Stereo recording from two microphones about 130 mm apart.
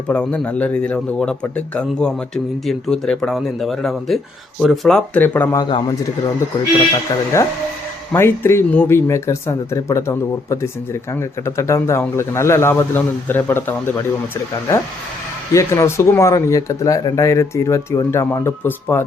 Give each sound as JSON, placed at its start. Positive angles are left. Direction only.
{"t": 0.1, "sound": "a man's voice", "side_deg": 10}
{"t": 5.5, "sound": "speech", "side_deg": 35}
{"t": 7.3, "sound": "speech", "side_deg": 20}
{"t": 15.5, "sound": "speech", "side_deg": 20}